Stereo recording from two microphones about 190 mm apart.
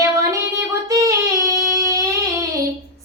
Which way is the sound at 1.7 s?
15° right (ahead or behind).